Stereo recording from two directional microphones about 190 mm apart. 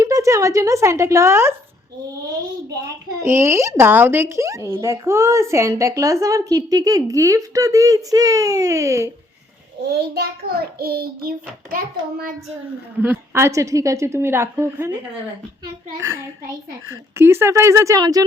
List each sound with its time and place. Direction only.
0.0 s speech: 15° right (ahead or behind)
3.2 s speech: 15° right (ahead or behind)
9.8 s a child's voice: 60° right (ahead or behind)
10.8 s child singing: 55° right (ahead or behind)
13.0 s speech: 10° right (ahead or behind)
16.9 s speech: 15° right (ahead or behind)